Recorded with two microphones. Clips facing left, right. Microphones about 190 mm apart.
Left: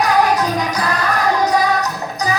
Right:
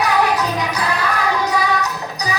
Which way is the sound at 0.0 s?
45° left (ahead or behind).